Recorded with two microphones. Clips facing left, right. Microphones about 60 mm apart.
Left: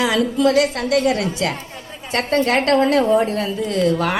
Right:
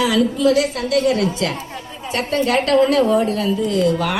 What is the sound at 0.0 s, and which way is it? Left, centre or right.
A woman's voice, left.